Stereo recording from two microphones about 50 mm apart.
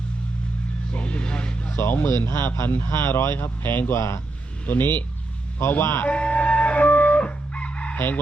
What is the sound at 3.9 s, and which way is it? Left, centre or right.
Speech, left.